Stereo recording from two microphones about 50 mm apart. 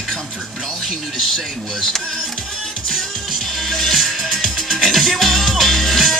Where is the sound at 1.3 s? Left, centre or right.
Centre.